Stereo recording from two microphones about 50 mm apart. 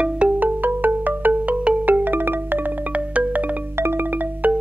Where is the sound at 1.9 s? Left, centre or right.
Right.